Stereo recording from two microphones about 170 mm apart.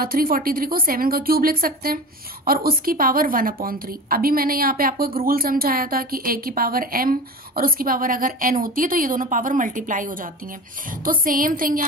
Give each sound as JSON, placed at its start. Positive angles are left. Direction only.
{"t": 0.0, "sound": "a woman's voice", "side_deg": -60}